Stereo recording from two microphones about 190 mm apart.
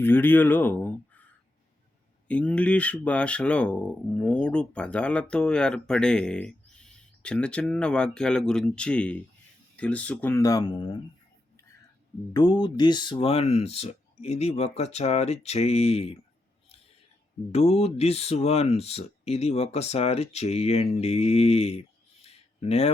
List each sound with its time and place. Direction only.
0.0 s speech: 10° left (ahead or behind)
12.3 s speech: 20° left (ahead or behind)
17.5 s speech: 35° left (ahead or behind)
22.2 s a sound: 35° left (ahead or behind)